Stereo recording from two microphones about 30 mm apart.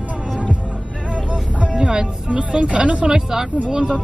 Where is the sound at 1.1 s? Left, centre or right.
Right.